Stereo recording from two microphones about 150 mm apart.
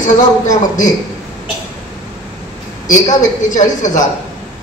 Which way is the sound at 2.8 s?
55° left (ahead or behind).